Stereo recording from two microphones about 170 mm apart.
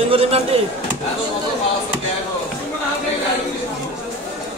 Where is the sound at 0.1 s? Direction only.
35° right (ahead or behind).